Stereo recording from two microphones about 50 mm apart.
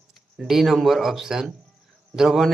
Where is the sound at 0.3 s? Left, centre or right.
Centre.